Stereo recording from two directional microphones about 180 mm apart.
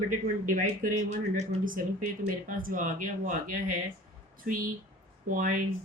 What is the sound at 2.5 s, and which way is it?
A woman's voice, 50° right (ahead or behind).